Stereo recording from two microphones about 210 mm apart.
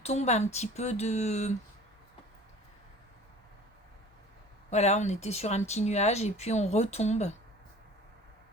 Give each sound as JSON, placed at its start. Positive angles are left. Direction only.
{"t": 0.0, "sound": "speech", "side_deg": 30}
{"t": 4.7, "sound": "speech", "side_deg": 30}